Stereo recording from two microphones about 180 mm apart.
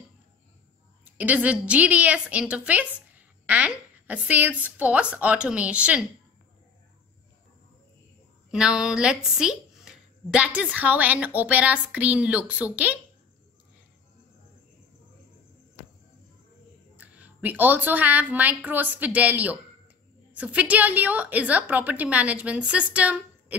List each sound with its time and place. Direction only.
1.1 s a woman's voice: 10° right (ahead or behind)
8.5 s a woman's voice: 5° right (ahead or behind)
16.9 s a woman's voice: 10° right (ahead or behind)